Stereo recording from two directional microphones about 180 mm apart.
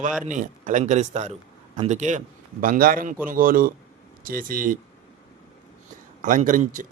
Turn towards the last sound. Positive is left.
turn(degrees=-45)  # may be behind; listen again after turning